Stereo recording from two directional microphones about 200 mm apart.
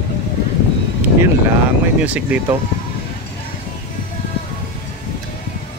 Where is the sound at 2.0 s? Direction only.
5° right (ahead or behind).